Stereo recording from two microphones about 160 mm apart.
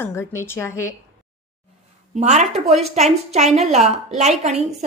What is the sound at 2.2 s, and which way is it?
A woman's voice, 45° right (ahead or behind).